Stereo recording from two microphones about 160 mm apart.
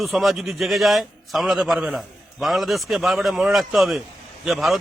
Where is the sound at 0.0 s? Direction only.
Centre (ahead or behind).